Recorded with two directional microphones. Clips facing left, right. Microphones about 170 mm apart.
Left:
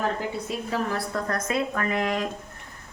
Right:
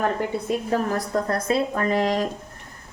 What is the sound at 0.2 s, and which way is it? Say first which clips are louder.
A woman's voice: right 5 dB; 45° right (ahead or behind).